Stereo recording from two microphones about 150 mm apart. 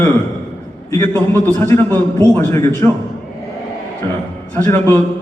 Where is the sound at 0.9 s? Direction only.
20° left (ahead or behind).